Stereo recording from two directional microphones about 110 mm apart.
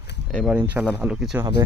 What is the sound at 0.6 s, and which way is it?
Speech, 15° right (ahead or behind).